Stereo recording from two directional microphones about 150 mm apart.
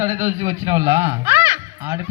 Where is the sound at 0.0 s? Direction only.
20° right (ahead or behind).